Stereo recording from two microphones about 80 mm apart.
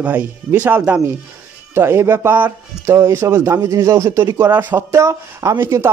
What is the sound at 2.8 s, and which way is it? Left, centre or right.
Speech, right.